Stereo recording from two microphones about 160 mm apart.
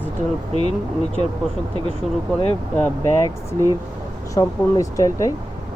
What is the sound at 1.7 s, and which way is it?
Speech, 30° right (ahead or behind).